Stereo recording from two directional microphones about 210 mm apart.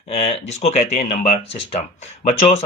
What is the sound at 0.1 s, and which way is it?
Speech, 30° left (ahead or behind).